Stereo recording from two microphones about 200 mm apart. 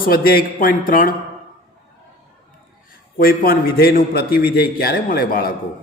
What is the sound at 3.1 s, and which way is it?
A man's voice, 45° left (ahead or behind).